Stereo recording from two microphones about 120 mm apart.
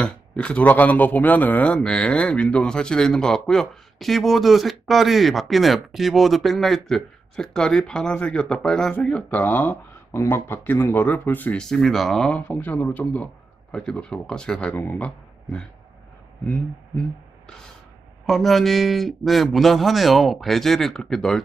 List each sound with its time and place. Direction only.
0.0 s a man's voice: 10° left (ahead or behind)
18.2 s a man's voice: centre (ahead or behind)